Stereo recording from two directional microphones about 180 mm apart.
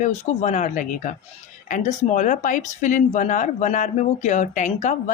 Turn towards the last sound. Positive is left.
turn(degrees=45)  # may be behind; listen again after turning